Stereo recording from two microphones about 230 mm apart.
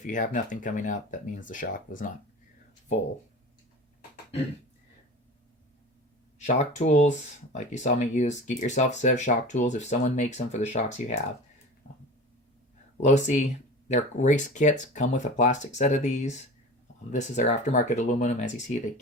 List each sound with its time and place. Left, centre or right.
0.0 s speech: left
6.4 s speech: left
13.0 s speech: left